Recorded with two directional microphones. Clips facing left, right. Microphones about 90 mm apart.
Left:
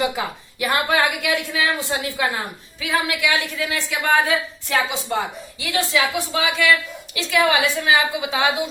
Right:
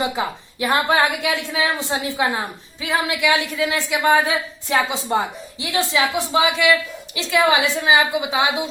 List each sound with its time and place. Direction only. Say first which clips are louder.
0.2 s speech: right 2 dB; 25° right (ahead or behind)